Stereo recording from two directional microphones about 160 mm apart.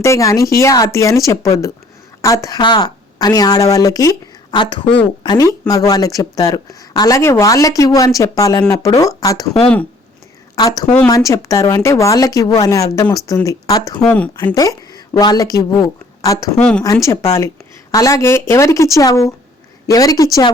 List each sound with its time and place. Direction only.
0.0 s speech: 20° left (ahead or behind)
10.5 s speech: 25° left (ahead or behind)
10.8 s speech: 5° left (ahead or behind)
11.1 s speech: 20° left (ahead or behind)
14.0 s speech: 10° left (ahead or behind)
14.3 s speech: 25° left (ahead or behind)